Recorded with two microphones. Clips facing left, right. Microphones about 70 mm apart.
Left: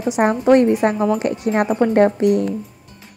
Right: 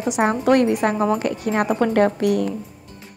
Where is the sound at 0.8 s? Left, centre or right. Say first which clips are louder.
Left 3 dB; left.